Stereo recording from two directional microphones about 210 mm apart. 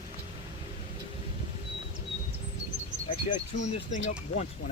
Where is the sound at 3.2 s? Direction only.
35° left (ahead or behind).